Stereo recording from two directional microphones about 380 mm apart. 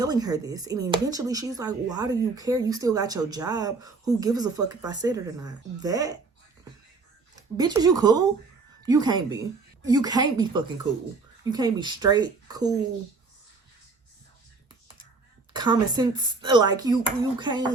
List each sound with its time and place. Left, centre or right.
0.0 s speech: centre
7.5 s speech: centre
15.5 s speech: centre